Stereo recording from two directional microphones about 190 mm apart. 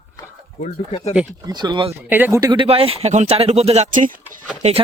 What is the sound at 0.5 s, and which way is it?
Speech, 40° left (ahead or behind).